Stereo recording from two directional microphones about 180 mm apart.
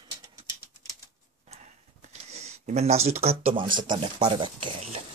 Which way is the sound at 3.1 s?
35° right (ahead or behind).